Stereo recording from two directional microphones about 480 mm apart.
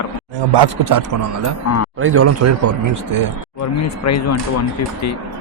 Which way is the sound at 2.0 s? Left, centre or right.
Right.